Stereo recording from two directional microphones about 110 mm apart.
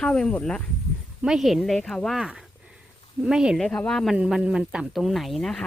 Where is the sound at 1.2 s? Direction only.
5° right (ahead or behind).